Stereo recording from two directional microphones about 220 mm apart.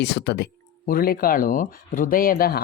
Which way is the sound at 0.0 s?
50° left (ahead or behind).